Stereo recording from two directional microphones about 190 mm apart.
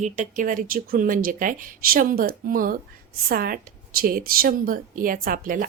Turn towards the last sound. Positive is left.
turn(degrees=-45)  # may be behind; listen again after turning